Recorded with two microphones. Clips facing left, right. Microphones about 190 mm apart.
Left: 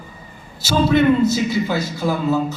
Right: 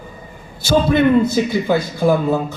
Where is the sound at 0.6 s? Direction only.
55° right (ahead or behind).